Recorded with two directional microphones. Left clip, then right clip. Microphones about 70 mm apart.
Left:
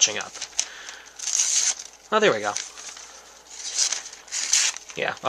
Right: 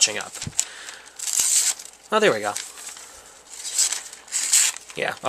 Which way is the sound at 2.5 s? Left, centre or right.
Centre.